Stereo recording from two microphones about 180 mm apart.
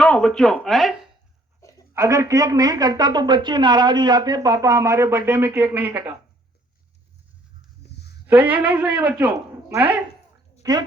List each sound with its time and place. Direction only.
0.0 s speech: 5° left (ahead or behind)
1.9 s a woman's voice: 15° right (ahead or behind)
7.9 s a sound: 70° left (ahead or behind)
8.3 s a woman's voice: 10° right (ahead or behind)
10.6 s speech: 20° right (ahead or behind)